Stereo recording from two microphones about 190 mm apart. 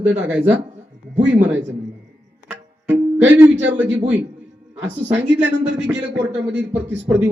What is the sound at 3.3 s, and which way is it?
Speech, 10° right (ahead or behind).